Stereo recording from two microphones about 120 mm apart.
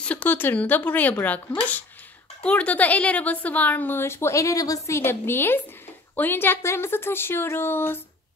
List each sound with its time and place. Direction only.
0.0 s a woman's voice: 10° left (ahead or behind)